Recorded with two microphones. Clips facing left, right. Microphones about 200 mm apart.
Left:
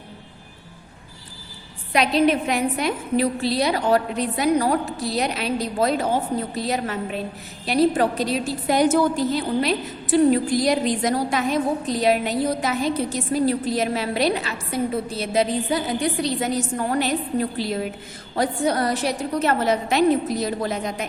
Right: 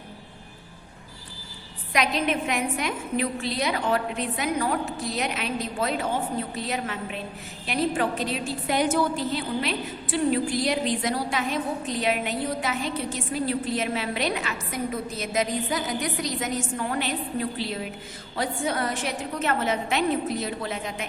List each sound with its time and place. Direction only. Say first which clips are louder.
1.9 s a woman's voice: left 6 dB; 35° left (ahead or behind)
18.3 s a woman's voice: left 6 dB; 40° left (ahead or behind)